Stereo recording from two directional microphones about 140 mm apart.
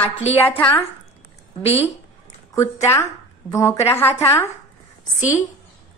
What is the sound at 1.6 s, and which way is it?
Speech, 45° left (ahead or behind).